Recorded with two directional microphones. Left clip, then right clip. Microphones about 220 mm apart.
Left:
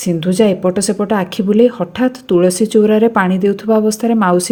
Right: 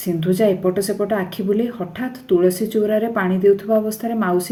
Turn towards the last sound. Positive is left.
turn(degrees=40)  # may be behind; listen again after turning